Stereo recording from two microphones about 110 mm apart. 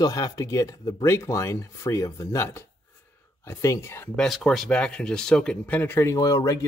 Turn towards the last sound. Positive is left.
turn(degrees=30)  # may be behind; listen again after turning